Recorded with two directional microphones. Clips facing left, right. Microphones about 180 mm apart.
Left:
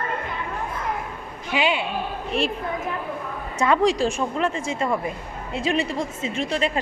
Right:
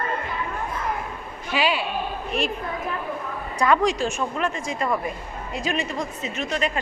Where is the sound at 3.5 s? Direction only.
30° left (ahead or behind).